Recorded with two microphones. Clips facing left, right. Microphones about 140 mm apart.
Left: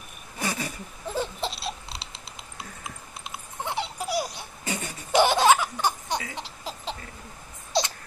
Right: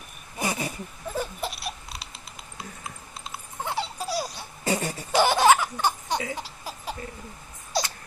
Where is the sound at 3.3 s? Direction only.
20° left (ahead or behind).